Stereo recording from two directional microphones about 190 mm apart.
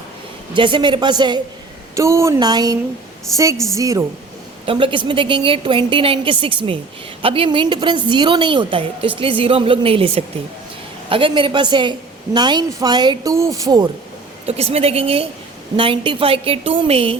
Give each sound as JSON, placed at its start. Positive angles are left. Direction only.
{"t": 0.5, "sound": "a woman's voice", "side_deg": -25}
{"t": 3.8, "sound": "a woman's voice", "side_deg": -20}
{"t": 14.4, "sound": "a woman's voice", "side_deg": -35}